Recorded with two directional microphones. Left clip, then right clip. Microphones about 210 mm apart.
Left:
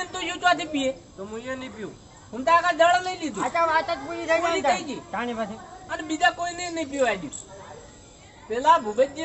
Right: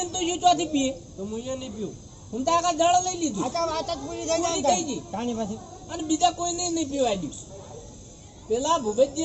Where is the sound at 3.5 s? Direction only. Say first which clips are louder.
Left 5 dB; 15° right (ahead or behind).